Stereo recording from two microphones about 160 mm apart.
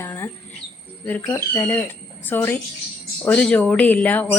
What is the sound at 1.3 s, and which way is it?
Speech, 10° left (ahead or behind).